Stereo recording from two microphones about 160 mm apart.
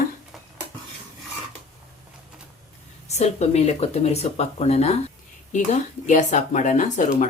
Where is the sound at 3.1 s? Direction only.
45° left (ahead or behind).